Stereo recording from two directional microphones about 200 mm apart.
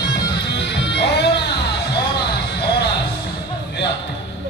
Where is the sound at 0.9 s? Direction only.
55° left (ahead or behind).